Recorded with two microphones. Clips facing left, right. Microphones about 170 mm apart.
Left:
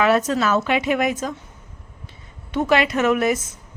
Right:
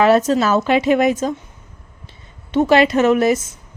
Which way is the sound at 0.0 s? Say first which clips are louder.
Right 5 dB; 30° right (ahead or behind).